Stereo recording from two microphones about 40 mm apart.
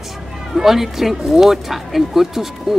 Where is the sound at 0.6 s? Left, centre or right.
Centre.